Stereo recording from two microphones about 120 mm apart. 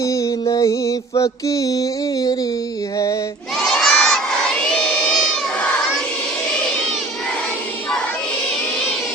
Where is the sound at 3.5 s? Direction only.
Centre (ahead or behind).